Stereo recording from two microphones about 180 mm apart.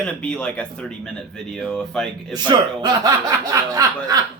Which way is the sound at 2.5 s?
20° right (ahead or behind).